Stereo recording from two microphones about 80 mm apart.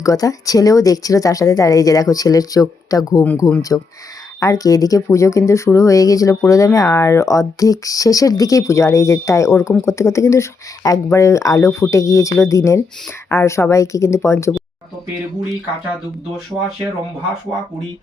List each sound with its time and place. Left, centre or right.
0.0 s speech: left